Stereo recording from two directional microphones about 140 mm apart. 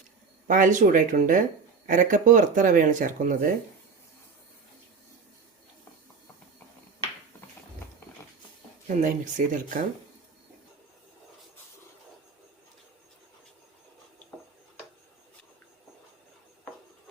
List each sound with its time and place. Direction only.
0.4 s speech: 65° right (ahead or behind)
8.9 s speech: 65° right (ahead or behind)